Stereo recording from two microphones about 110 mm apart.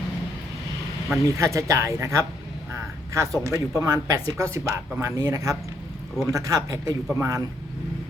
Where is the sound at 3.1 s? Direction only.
30° right (ahead or behind).